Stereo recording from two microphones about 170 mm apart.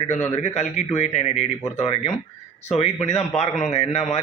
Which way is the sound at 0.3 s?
40° left (ahead or behind).